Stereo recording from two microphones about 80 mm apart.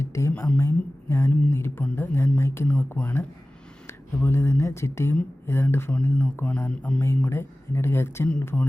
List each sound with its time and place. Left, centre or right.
0.0 s speech: left; by 6.6 s centre
6.7 s mantra: centre
7.3 s speech: left